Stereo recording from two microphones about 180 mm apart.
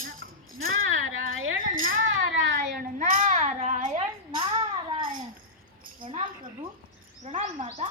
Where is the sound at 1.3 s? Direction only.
90° right.